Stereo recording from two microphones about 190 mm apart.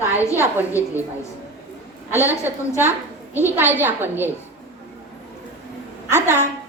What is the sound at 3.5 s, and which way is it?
Speech, 10° right (ahead or behind).